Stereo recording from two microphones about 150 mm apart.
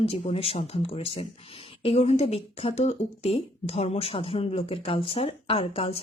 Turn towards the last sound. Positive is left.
turn(degrees=40)  # may be behind; listen again after turning